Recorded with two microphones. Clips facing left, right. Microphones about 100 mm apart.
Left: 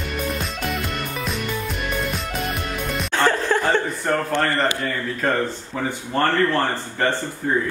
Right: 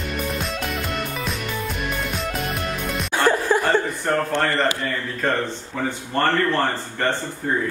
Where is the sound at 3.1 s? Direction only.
10° right (ahead or behind).